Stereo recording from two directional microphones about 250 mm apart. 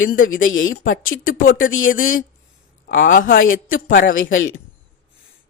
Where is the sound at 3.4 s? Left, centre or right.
Left.